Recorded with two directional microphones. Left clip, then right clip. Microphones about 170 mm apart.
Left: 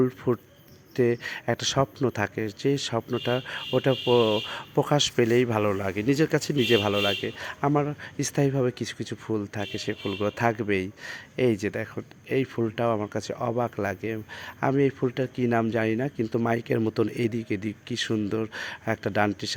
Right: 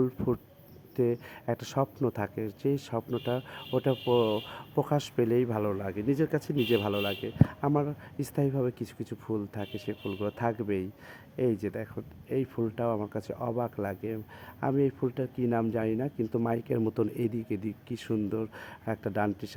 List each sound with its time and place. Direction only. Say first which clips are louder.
0.9 s speech: left 5 dB; 15° left (ahead or behind)
1.8 s speech: left 5 dB; 25° left (ahead or behind)
3.1 s speech: left 5 dB; 25° left (ahead or behind)
4.8 s speech: left 6 dB; 15° left (ahead or behind)
9.2 s speech: left 4 dB; 25° left (ahead or behind)
9.6 s speech: left 6 dB; 15° left (ahead or behind)